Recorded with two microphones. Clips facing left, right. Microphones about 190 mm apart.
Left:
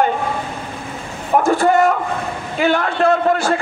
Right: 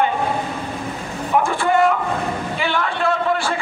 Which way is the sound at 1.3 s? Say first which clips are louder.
Left 4 dB; 40° left (ahead or behind).